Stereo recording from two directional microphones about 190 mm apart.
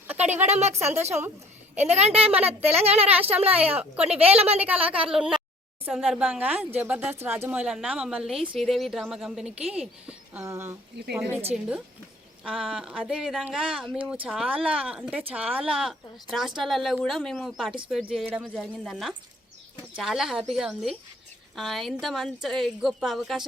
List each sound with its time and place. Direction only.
0.1 s a woman's voice: 10° right (ahead or behind)
0.4 s speech: 35° right (ahead or behind)
3.1 s a woman's voice: 10° right (ahead or behind)
4.2 s speech: 30° right (ahead or behind)
5.0 s a woman's voice: 5° right (ahead or behind)
11.0 s speech: 65° right (ahead or behind)
11.5 s a woman's voice: 5° right (ahead or behind)